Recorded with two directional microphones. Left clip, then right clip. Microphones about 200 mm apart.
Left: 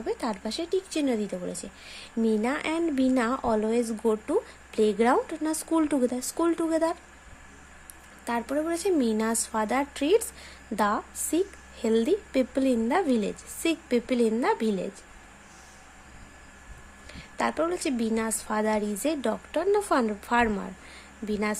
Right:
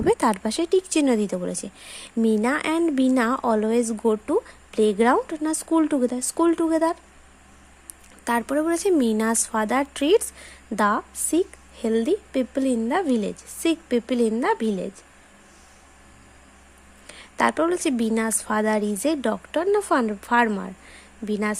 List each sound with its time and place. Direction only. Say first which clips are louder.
0.0 s speech: right 10 dB; 30° right (ahead or behind)
8.2 s speech: right 6 dB; 25° right (ahead or behind)
17.1 s speech: right 7 dB; 25° right (ahead or behind)